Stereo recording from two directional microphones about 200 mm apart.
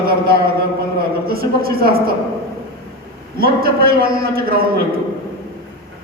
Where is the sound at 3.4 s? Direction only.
50° right (ahead or behind).